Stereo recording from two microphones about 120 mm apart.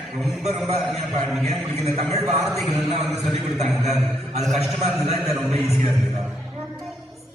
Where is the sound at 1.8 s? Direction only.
60° right (ahead or behind).